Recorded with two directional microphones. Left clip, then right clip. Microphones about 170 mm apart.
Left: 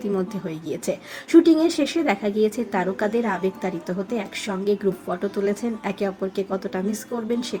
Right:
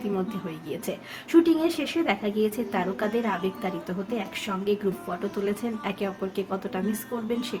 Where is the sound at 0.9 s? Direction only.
20° left (ahead or behind).